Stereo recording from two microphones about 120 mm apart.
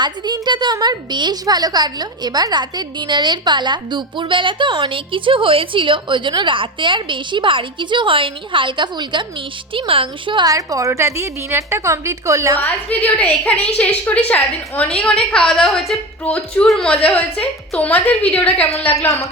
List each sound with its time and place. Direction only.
0.0 s a woman's voice: 40° right (ahead or behind)
10.4 s a woman's voice: 30° right (ahead or behind)
12.5 s a woman's voice: 15° left (ahead or behind)